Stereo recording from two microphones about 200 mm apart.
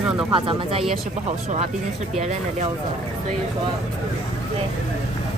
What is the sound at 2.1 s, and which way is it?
Speech, 35° right (ahead or behind).